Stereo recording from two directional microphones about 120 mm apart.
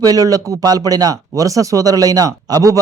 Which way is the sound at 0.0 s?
30° right (ahead or behind).